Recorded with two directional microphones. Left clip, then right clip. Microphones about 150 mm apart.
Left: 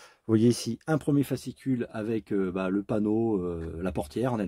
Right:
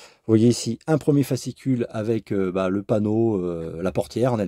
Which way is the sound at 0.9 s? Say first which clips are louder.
Right 6 dB; 40° right (ahead or behind).